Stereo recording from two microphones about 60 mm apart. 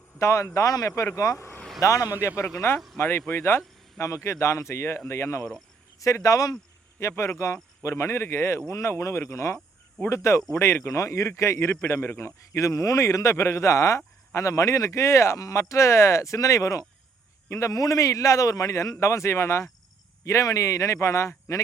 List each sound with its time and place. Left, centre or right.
0.2 s a man's voice: left
1.1 s a man's voice: left
2.2 s a man's voice: left
2.6 s speech: left
6.0 s speech: left
7.2 s a man's voice: left
20.2 s a man's voice: left